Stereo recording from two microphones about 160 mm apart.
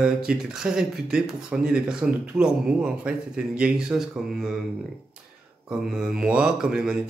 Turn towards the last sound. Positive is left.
turn(degrees=-5)  # may be behind; listen again after turning